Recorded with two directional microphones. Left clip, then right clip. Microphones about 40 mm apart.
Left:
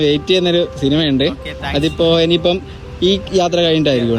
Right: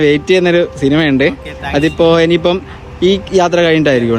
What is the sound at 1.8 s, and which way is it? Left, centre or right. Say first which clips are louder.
Speech: right 4 dB; left.